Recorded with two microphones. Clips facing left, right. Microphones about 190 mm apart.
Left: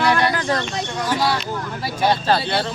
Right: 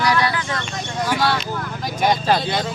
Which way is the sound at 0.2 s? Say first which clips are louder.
Left 2 dB; 40° left (ahead or behind).